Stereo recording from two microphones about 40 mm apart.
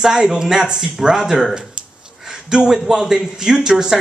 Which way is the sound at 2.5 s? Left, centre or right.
Centre.